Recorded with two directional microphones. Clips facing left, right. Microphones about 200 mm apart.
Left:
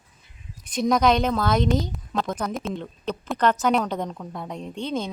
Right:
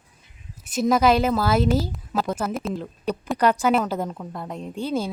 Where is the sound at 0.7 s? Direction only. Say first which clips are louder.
Right 1 dB; 5° right (ahead or behind).